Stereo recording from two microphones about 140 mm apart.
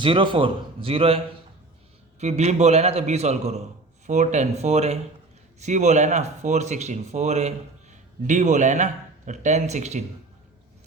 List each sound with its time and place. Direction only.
0.0 s a man's voice: 35° right (ahead or behind); by 10.0 s 55° right (ahead or behind)